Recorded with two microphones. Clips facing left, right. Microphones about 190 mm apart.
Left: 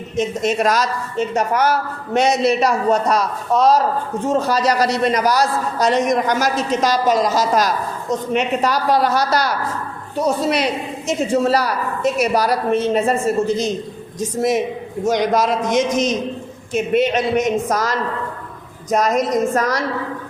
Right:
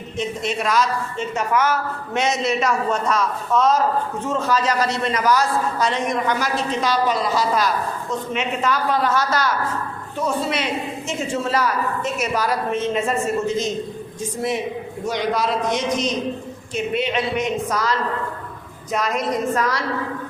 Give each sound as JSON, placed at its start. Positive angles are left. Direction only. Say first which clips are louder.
{"t": 0.2, "sound": "a man's voice", "louder": "left 6 dB", "side_deg": 45}
{"t": 14.2, "sound": "a man's voice", "louder": "left 6 dB", "side_deg": 40}